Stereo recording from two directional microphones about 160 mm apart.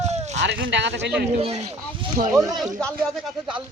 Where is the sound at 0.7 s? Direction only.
90° right.